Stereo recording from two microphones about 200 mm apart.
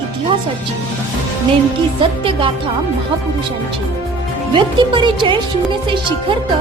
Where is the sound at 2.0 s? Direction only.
25° right (ahead or behind).